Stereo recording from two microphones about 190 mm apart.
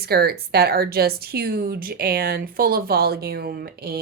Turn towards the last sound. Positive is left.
turn(degrees=-55)  # may be behind; listen again after turning